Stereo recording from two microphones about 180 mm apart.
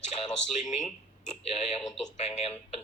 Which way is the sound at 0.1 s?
35° left (ahead or behind).